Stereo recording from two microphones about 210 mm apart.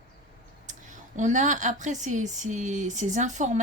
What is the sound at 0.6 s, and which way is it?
A woman's voice, 35° right (ahead or behind).